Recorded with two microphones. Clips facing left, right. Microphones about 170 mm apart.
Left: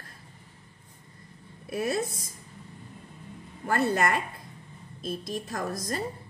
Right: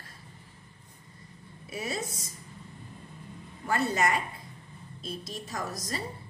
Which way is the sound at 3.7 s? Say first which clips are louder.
Left 2 dB; 55° left (ahead or behind).